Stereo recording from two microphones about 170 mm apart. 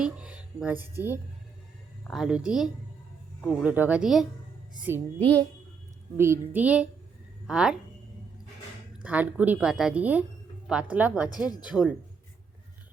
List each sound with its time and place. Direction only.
0.0 s speech: 5° right (ahead or behind)
2.0 s a woman's voice: centre (ahead or behind)
4.7 s music: 10° right (ahead or behind)
6.1 s a woman's voice: 15° right (ahead or behind)
9.0 s a woman's voice: 10° right (ahead or behind)
11.4 s speech: 20° left (ahead or behind)
11.7 s a woman's voice: centre (ahead or behind)